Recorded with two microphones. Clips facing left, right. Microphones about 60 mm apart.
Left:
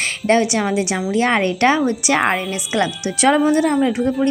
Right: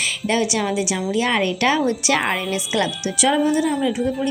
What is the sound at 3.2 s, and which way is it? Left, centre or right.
Speech, left.